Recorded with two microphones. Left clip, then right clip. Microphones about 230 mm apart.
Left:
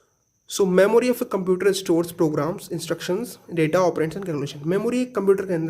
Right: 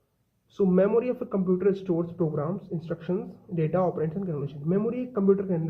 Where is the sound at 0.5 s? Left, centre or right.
Left.